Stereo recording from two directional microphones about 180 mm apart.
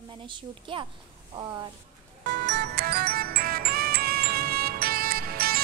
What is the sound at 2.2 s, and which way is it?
Music, 85° right.